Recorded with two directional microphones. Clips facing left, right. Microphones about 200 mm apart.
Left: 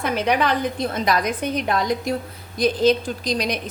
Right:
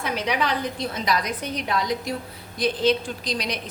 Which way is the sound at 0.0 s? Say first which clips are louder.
Left 5 dB; 50° left (ahead or behind).